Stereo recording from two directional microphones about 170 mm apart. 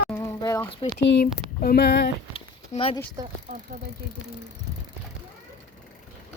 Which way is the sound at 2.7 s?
35° left (ahead or behind).